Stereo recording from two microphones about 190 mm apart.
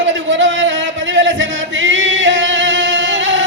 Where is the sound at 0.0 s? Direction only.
75° right (ahead or behind).